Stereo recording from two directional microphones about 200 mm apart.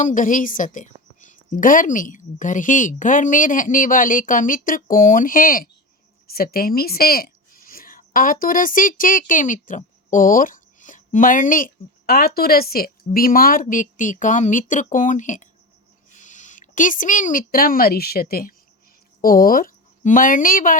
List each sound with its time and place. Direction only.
0.0 s a woman's voice: 40° left (ahead or behind)